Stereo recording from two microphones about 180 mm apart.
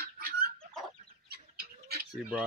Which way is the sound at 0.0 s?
55° right (ahead or behind).